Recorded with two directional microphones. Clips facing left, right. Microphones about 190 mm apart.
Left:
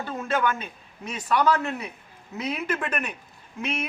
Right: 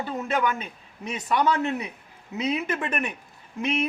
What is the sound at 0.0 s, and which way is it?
A man's voice, 20° right (ahead or behind).